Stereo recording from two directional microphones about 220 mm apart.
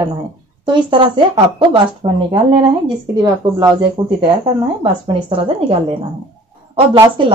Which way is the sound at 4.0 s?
25° right (ahead or behind).